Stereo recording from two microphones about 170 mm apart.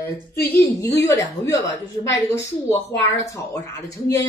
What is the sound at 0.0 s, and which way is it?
Speech, 10° left (ahead or behind).